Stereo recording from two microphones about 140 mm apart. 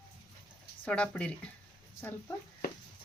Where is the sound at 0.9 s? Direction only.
5° left (ahead or behind).